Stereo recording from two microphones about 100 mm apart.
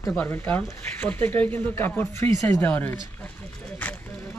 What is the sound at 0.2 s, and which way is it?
Speech, 20° left (ahead or behind).